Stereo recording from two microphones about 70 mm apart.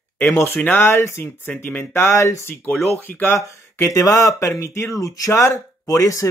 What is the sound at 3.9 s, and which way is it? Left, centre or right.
Speech, left.